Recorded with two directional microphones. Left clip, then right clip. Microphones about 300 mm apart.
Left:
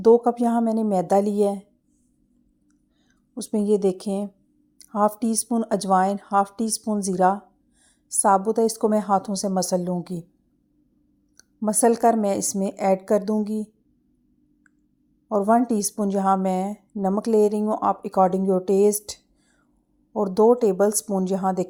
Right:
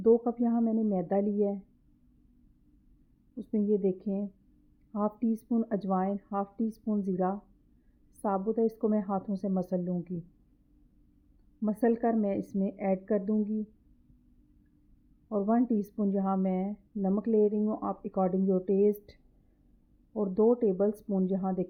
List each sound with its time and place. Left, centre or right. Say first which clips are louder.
0.0 s a woman's voice: left 9 dB; centre
3.5 s a woman's voice: left 8 dB; centre
11.6 s a woman's voice: left 10 dB; centre
15.3 s a woman's voice: left 9 dB; centre